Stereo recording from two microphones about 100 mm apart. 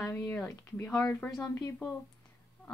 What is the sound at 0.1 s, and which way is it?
Speech, 15° left (ahead or behind).